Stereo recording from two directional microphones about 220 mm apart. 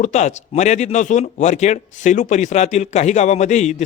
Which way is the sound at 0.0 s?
30° left (ahead or behind).